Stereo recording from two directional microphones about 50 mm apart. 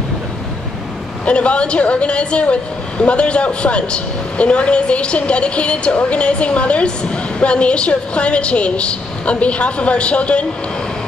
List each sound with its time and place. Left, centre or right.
1.2 s a woman's voice: left